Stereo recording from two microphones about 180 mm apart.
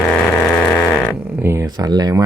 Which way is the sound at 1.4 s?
15° right (ahead or behind).